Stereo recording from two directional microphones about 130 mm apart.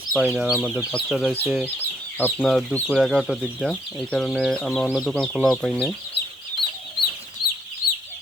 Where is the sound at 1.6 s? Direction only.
15° left (ahead or behind).